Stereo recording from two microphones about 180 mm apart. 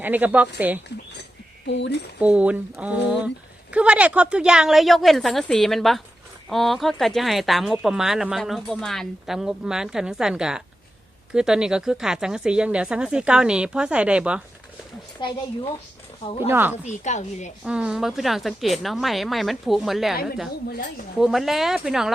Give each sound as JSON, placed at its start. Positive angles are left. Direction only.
{"t": 0.0, "sound": "speech", "side_deg": -10}
{"t": 1.6, "sound": "speech", "side_deg": 80}
{"t": 2.2, "sound": "speech", "side_deg": -5}
{"t": 15.2, "sound": "speech", "side_deg": 25}
{"t": 16.5, "sound": "speech", "side_deg": -10}
{"t": 16.8, "sound": "a woman's voice", "side_deg": 40}
{"t": 17.6, "sound": "speech", "side_deg": -5}
{"t": 21.2, "sound": "speech", "side_deg": 0}